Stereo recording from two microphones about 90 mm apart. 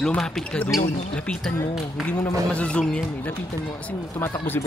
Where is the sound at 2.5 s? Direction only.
10° left (ahead or behind).